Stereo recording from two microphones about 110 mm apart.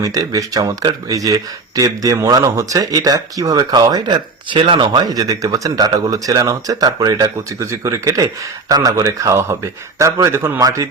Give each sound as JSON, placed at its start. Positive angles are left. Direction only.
{"t": 0.0, "sound": "speech", "side_deg": -35}